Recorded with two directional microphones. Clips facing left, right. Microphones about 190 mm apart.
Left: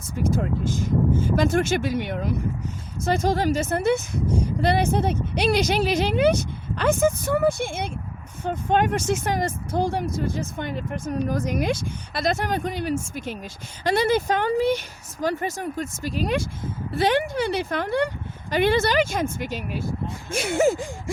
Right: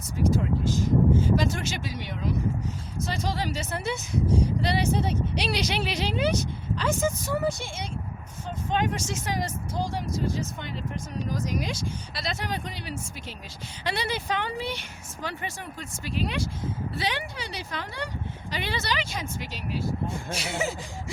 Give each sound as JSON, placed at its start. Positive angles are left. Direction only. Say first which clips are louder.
{"t": 0.2, "sound": "speech", "louder": "left 1 dB", "side_deg": 50}